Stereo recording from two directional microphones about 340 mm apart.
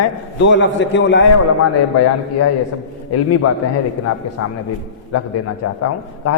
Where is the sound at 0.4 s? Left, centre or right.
Left.